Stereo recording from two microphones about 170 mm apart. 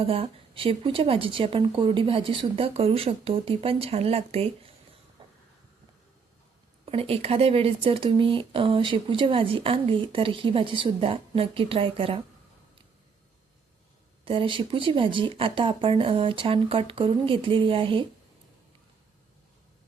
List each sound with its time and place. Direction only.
0.0 s speech: 35° right (ahead or behind)
5.2 s a sound: 30° right (ahead or behind)
6.8 s speech: 35° right (ahead or behind)
14.3 s speech: 30° right (ahead or behind)